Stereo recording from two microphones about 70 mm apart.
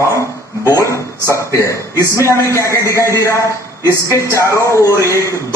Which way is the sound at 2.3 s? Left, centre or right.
Left.